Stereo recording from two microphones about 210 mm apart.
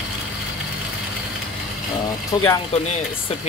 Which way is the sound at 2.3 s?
25° left (ahead or behind).